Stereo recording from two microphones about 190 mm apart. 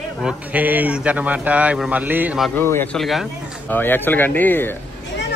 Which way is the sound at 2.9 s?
Centre (ahead or behind).